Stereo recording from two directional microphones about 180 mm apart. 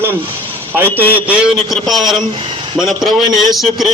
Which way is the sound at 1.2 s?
5° right (ahead or behind).